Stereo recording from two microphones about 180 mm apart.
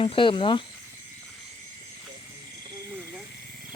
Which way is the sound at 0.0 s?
30° left (ahead or behind).